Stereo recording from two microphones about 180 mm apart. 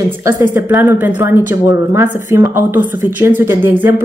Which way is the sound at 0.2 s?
15° right (ahead or behind).